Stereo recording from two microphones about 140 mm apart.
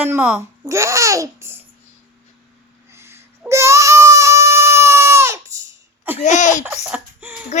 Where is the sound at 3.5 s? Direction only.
20° right (ahead or behind).